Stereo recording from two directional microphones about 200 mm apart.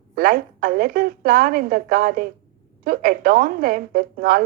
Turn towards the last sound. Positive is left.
turn(degrees=-45)  # may be behind; listen again after turning